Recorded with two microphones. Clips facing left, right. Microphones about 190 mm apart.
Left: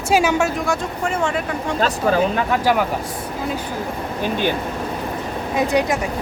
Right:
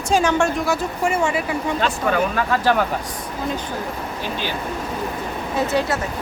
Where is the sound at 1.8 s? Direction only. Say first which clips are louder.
Left 5 dB; 30° left (ahead or behind).